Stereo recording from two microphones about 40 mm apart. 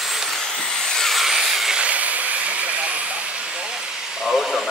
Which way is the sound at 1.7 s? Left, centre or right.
Right.